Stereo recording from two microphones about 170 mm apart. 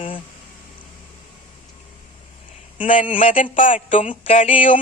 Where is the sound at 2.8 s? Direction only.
50° left (ahead or behind).